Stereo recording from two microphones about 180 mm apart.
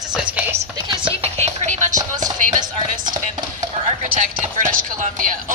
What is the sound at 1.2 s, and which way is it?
Music, 35° right (ahead or behind).